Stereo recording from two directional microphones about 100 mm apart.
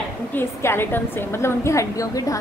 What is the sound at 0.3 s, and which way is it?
A woman's voice, 25° left (ahead or behind).